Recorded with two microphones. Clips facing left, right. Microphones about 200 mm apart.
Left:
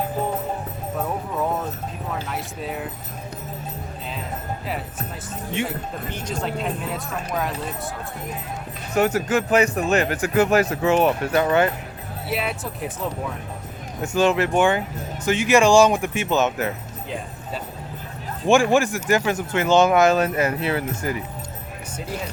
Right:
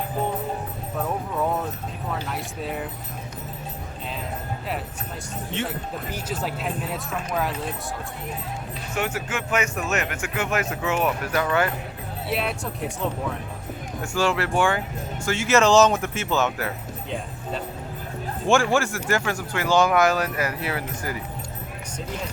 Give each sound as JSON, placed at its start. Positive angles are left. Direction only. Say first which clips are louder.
{"t": 2.3, "sound": "speech", "louder": "left 1 dB", "side_deg": 0}
{"t": 5.6, "sound": "speech", "louder": "left 1 dB", "side_deg": -5}
{"t": 9.0, "sound": "speech", "louder": "left 8 dB", "side_deg": 40}
{"t": 12.3, "sound": "speech", "louder": "left 1 dB", "side_deg": 0}
{"t": 14.0, "sound": "speech", "louder": "left 5 dB", "side_deg": 20}
{"t": 18.4, "sound": "speech", "louder": "left 4 dB", "side_deg": 15}